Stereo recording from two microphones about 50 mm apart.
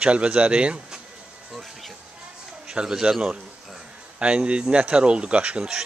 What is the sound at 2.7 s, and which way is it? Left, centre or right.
A child's voice, centre.